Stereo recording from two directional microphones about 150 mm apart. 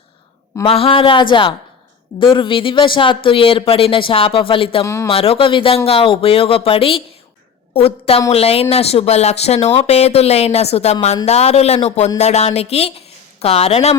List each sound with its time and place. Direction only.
0.6 s speech: 40° left (ahead or behind)